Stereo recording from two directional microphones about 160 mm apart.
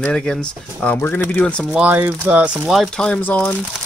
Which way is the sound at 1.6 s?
10° right (ahead or behind).